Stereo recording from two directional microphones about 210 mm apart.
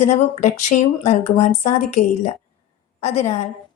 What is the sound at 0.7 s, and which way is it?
Speech, 40° left (ahead or behind).